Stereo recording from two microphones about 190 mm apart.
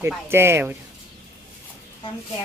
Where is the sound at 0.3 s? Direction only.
10° right (ahead or behind).